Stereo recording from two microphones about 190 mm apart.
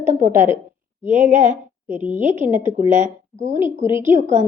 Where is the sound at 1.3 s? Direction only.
40° right (ahead or behind).